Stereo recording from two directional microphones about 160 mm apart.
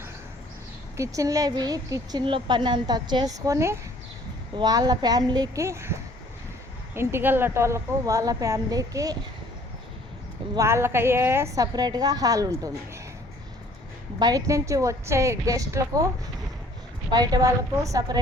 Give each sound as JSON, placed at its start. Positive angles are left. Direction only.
{"t": 0.9, "sound": "a woman's voice", "side_deg": -20}
{"t": 10.5, "sound": "a woman's voice", "side_deg": -20}
{"t": 14.2, "sound": "a woman's voice", "side_deg": -25}
{"t": 17.1, "sound": "a woman's voice", "side_deg": -25}